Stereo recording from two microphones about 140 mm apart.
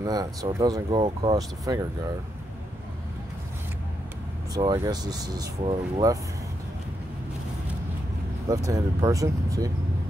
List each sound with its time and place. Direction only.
0.0 s speech: 25° right (ahead or behind)
1.7 s speech: 25° right (ahead or behind)
4.7 s speech: 30° right (ahead or behind)
8.6 s speech: 25° right (ahead or behind)